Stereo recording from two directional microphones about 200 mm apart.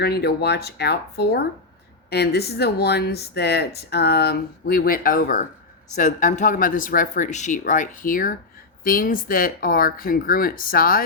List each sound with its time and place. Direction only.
0.0 s speech: 55° left (ahead or behind)